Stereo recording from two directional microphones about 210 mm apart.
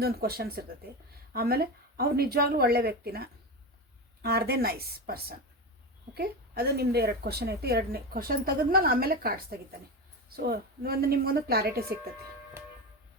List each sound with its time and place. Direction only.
0.0 s a woman's voice: 45° right (ahead or behind)